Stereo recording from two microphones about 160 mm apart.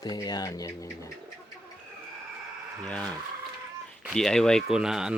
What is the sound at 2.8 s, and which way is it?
Speech, 10° left (ahead or behind).